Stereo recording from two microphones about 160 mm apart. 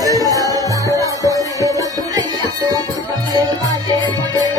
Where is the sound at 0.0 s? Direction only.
20° right (ahead or behind).